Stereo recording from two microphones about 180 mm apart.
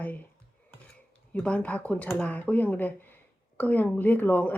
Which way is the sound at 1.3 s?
10° left (ahead or behind).